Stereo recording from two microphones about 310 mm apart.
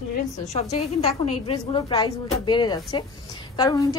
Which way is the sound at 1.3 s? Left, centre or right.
Centre.